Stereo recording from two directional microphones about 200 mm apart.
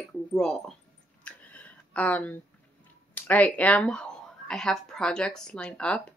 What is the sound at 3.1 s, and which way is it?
Speech, 10° left (ahead or behind).